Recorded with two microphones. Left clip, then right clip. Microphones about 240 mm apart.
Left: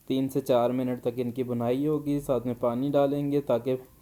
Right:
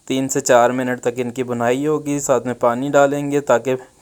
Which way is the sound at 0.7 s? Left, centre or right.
Centre.